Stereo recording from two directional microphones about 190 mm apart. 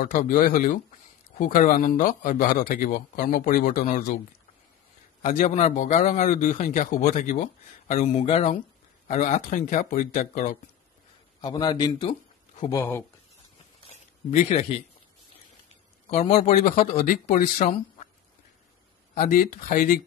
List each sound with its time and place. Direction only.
0.0 s speech: 45° left (ahead or behind)
5.2 s a man's voice: 35° left (ahead or behind)
11.4 s speech: 20° left (ahead or behind)
12.7 s speech: 10° left (ahead or behind)
16.1 s a man's voice: 35° left (ahead or behind)
19.1 s speech: 45° left (ahead or behind)